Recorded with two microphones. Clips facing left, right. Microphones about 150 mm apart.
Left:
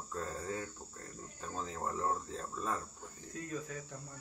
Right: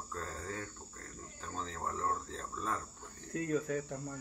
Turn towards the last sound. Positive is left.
turn(degrees=-55)  # may be behind; listen again after turning